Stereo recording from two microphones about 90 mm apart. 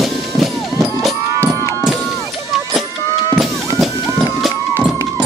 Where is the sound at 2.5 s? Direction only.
Centre (ahead or behind).